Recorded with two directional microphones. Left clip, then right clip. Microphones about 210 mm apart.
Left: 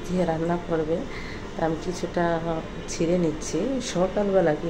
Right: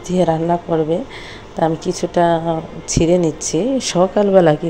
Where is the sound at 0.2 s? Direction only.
35° right (ahead or behind).